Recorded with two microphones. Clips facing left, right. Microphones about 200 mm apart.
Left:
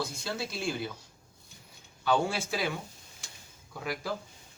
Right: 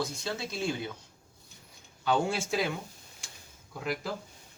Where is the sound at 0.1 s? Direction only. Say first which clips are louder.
Even; 20° right (ahead or behind).